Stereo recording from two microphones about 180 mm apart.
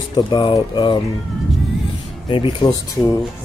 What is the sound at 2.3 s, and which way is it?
Speech, 30° left (ahead or behind).